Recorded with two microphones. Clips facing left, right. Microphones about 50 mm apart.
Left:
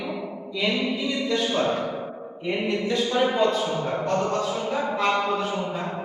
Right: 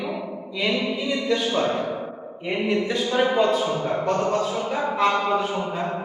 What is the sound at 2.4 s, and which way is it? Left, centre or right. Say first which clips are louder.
A man's voice: right 2 dB; centre.